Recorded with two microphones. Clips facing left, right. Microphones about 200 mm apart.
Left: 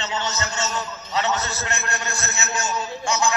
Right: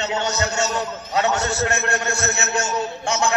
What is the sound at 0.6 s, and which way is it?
Speech, 55° right (ahead or behind).